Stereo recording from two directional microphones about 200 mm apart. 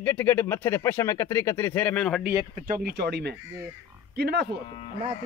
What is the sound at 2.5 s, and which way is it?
Speech, 45° right (ahead or behind).